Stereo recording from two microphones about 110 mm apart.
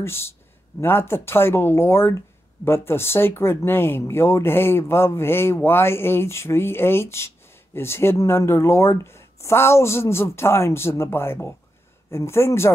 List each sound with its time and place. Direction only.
0.0 s speech: 20° left (ahead or behind)